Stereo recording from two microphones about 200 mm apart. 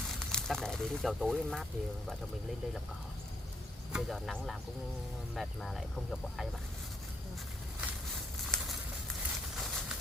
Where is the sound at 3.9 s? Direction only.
Centre (ahead or behind).